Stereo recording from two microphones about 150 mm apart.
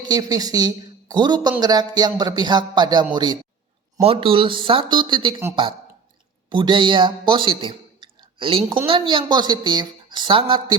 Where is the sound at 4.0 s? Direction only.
40° right (ahead or behind).